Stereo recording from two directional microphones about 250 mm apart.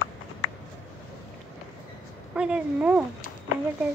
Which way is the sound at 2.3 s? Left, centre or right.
Centre.